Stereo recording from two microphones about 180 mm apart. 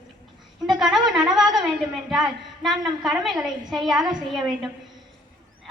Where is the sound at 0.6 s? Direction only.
Centre (ahead or behind).